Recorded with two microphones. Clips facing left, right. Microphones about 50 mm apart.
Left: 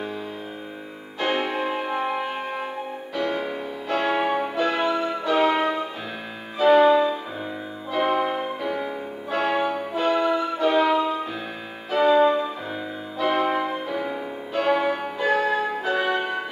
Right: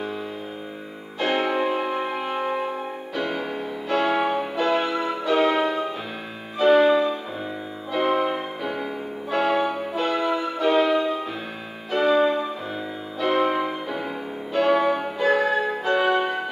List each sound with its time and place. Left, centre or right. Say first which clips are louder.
1.2 s music: right 2 dB; centre